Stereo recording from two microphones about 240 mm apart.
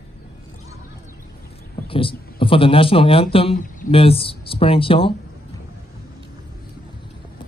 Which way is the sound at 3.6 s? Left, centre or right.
Left.